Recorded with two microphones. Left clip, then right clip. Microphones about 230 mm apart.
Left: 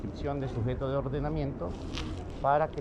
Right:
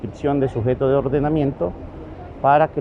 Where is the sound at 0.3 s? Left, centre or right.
Right.